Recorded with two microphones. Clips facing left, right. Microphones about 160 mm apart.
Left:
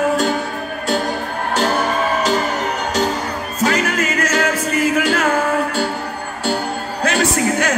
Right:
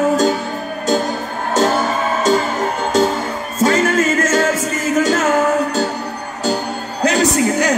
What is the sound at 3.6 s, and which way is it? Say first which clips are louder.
Music: right 4 dB; 25° right (ahead or behind).